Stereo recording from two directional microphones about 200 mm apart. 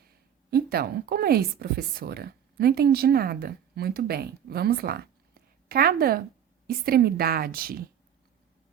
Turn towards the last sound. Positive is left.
turn(degrees=-50)  # may be behind; listen again after turning